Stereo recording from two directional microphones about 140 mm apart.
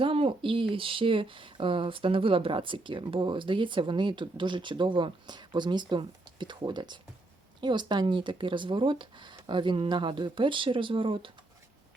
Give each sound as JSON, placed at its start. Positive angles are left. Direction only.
{"t": 0.0, "sound": "speech", "side_deg": -40}